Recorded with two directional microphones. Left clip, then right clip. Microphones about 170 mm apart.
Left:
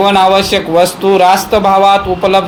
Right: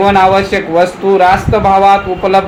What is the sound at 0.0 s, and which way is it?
Speech, 35° left (ahead or behind).